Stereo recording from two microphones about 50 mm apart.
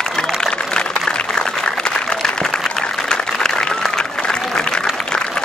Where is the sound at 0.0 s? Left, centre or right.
Centre.